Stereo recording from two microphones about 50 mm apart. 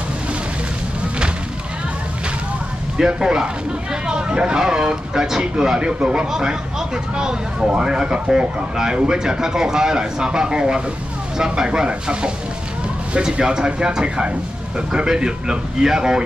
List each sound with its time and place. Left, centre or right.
3.0 s speech: centre